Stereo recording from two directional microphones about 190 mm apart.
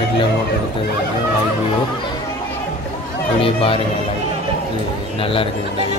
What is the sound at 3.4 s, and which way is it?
Speech, 30° left (ahead or behind).